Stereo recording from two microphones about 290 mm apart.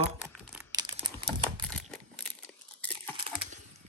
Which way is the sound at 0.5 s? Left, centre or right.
Centre.